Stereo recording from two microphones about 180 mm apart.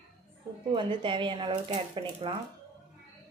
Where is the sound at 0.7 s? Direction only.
25° right (ahead or behind).